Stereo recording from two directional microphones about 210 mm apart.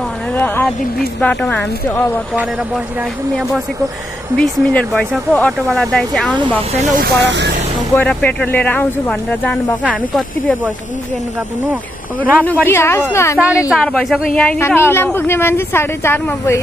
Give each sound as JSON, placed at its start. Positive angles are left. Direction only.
{"t": 1.2, "sound": "speech", "side_deg": 5}
{"t": 4.4, "sound": "speech", "side_deg": 5}
{"t": 6.7, "sound": "speech", "side_deg": -35}
{"t": 7.2, "sound": "speech", "side_deg": -55}
{"t": 7.9, "sound": "speech", "side_deg": 5}
{"t": 12.2, "sound": "speech", "side_deg": -10}
{"t": 12.4, "sound": "speech", "side_deg": 10}
{"t": 13.7, "sound": "speech", "side_deg": 0}